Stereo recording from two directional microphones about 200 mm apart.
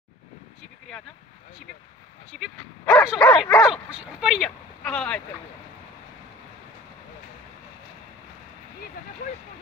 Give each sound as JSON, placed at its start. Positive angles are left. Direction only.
{"t": 2.3, "sound": "speech", "side_deg": 0}